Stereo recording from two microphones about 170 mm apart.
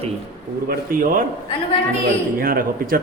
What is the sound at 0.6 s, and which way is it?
Speech, 55° right (ahead or behind).